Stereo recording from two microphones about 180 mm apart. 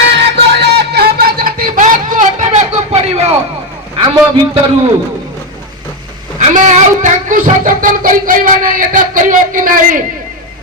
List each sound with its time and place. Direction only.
0.0 s music: 75° right (ahead or behind); by 3.3 s 35° right (ahead or behind)
3.9 s a sound: 30° right (ahead or behind)
6.4 s speech: 40° right (ahead or behind)